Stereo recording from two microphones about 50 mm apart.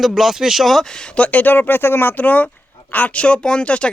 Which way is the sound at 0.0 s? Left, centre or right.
Centre.